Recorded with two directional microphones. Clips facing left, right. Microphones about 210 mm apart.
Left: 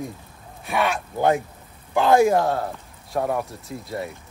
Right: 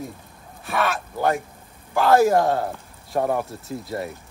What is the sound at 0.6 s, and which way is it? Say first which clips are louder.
Speech: left 1 dB; 15° left (ahead or behind).